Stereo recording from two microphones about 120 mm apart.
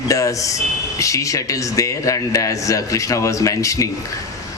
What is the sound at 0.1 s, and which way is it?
A man's voice, 25° left (ahead or behind).